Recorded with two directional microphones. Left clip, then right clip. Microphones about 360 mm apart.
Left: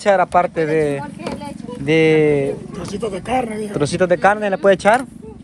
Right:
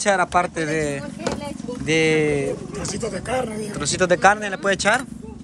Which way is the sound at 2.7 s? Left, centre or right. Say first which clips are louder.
Left 1 dB; centre.